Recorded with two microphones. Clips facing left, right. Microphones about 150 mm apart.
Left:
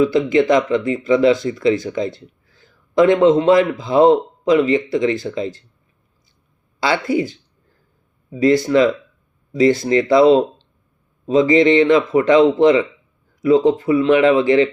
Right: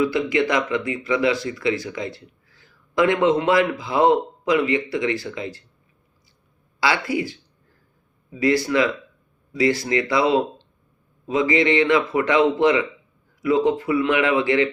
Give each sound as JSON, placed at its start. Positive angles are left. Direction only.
{"t": 0.0, "sound": "speech", "side_deg": 25}
{"t": 6.7, "sound": "speech", "side_deg": 25}